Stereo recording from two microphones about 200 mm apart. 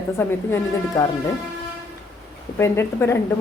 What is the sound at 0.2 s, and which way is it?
Speech, 10° left (ahead or behind).